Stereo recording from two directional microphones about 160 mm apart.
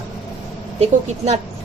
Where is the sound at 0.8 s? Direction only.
40° right (ahead or behind).